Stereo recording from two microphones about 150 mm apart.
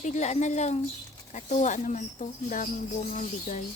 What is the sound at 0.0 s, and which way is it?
A woman's voice, 50° left (ahead or behind).